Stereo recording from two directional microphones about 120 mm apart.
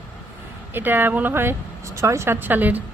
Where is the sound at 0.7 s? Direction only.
15° right (ahead or behind).